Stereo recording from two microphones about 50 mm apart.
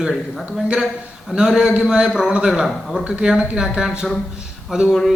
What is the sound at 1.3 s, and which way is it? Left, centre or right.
A man's voice, centre.